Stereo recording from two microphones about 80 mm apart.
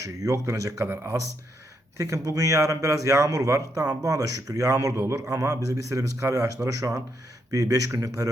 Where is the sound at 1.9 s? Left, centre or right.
Right.